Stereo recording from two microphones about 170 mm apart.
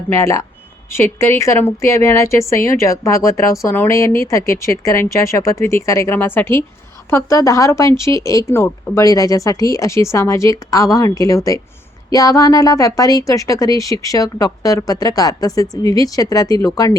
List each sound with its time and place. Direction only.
0.1 s speech: 15° left (ahead or behind)